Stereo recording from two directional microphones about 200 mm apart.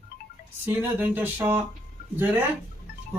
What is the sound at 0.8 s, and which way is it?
Speech, 10° right (ahead or behind).